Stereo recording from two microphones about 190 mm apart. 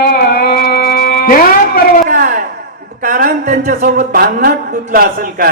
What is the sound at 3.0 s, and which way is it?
Speech, 45° right (ahead or behind).